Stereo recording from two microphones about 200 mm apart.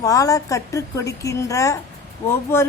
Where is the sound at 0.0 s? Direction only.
15° left (ahead or behind).